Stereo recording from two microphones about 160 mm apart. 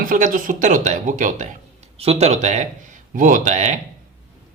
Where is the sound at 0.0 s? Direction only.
55° right (ahead or behind).